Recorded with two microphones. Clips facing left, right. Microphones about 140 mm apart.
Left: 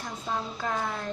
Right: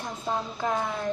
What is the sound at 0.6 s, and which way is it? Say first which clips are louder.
Speech: right 4 dB; 15° right (ahead or behind).